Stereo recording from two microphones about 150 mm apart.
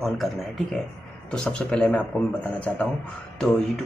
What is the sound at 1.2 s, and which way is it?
Speech, 5° left (ahead or behind).